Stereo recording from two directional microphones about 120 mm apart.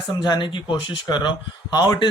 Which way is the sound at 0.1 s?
40° left (ahead or behind).